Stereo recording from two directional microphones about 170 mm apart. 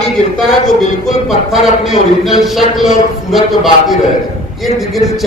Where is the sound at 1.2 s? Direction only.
Centre (ahead or behind).